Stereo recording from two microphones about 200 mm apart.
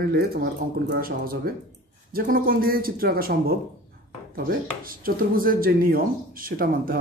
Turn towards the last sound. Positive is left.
turn(degrees=-45)  # may be behind; listen again after turning